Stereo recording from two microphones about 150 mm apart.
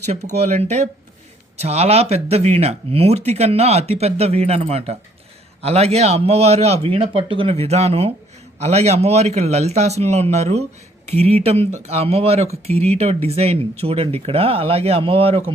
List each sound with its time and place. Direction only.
0.1 s speech: 45° right (ahead or behind)